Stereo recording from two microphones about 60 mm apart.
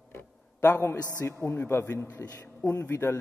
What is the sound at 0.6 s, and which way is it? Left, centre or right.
A man's voice, left.